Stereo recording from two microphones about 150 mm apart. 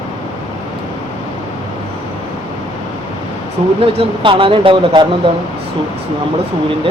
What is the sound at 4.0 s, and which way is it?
Speech, 35° right (ahead or behind).